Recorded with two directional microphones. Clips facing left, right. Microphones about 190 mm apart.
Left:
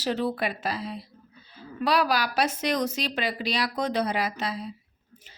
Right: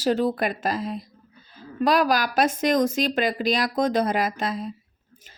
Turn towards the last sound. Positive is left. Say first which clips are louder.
# right 4 dB
turn(degrees=-50)  # may be behind; listen again after turning